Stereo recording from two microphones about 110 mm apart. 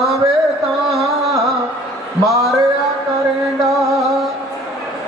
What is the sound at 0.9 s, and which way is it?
Music, centre (ahead or behind).